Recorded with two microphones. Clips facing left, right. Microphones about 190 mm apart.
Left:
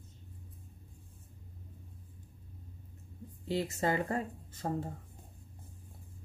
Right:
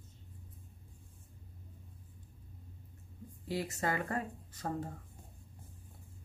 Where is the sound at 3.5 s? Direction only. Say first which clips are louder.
Left 4 dB; 25° left (ahead or behind).